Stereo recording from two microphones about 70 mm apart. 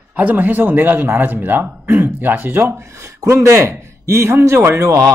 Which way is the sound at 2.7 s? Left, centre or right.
Right.